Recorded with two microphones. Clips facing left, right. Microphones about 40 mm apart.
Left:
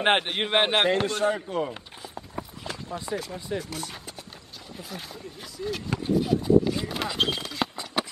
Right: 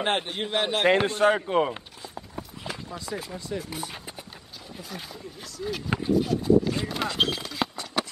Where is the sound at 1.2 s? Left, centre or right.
Right.